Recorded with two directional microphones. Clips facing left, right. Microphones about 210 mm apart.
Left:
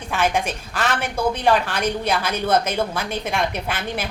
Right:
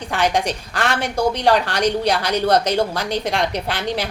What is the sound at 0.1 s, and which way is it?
A woman's voice, 15° right (ahead or behind).